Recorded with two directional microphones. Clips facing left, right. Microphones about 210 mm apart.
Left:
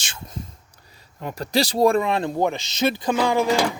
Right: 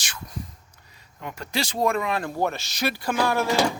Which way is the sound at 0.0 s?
25° left (ahead or behind).